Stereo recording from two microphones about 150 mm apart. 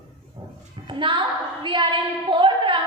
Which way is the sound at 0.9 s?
35° right (ahead or behind).